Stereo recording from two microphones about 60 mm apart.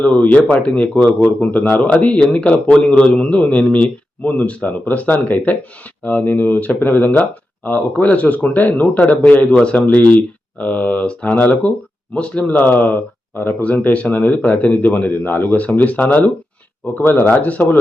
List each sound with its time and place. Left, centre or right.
0.0 s speech: left